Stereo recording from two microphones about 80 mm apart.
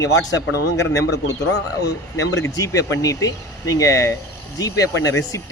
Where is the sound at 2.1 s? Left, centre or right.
Left.